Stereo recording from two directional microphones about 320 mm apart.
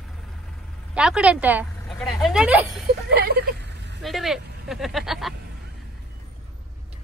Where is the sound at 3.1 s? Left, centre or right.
Right.